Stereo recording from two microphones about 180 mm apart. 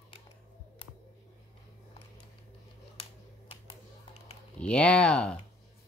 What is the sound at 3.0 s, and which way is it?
Finger snapping, 30° left (ahead or behind).